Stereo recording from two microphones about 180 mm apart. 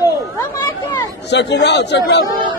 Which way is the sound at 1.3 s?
70° left (ahead or behind).